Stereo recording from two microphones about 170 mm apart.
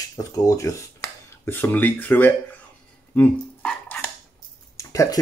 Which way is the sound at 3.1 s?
10° left (ahead or behind).